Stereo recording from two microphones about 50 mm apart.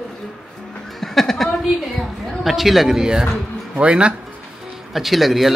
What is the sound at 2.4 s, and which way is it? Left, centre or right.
Speech, centre.